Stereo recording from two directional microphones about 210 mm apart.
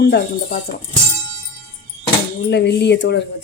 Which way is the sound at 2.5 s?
50° left (ahead or behind).